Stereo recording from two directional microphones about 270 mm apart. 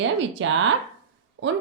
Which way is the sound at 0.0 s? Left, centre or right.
Right.